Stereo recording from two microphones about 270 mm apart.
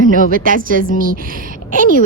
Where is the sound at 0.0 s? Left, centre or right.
Right.